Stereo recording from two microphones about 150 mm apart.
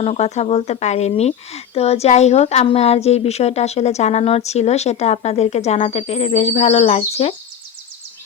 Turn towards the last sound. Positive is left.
turn(degrees=45)  # may be behind; listen again after turning